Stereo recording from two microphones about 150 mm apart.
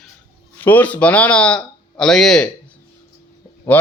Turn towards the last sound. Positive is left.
turn(degrees=10)  # may be behind; listen again after turning